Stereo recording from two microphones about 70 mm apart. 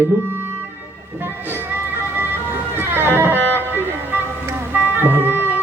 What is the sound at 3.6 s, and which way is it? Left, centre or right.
Music, right.